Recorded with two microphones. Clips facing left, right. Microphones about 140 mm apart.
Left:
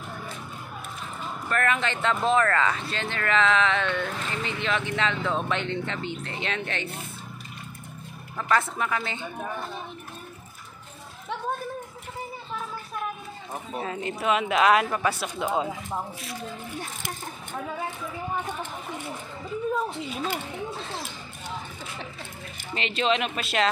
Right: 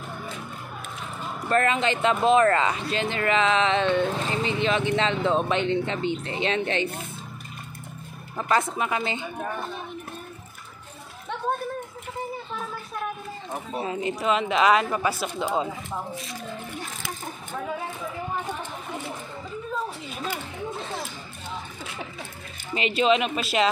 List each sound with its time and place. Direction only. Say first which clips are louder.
1.5 s speech: right 4 dB; 25° right (ahead or behind)
8.4 s speech: right 1 dB; 20° right (ahead or behind)
13.7 s speech: right 3 dB; 10° right (ahead or behind)
14.2 s speech: even; 5° left (ahead or behind)
22.8 s speech: right 4 dB; 5° right (ahead or behind)